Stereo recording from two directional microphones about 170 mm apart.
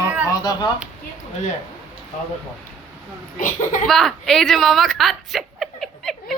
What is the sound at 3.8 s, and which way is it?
A woman's voice, centre (ahead or behind).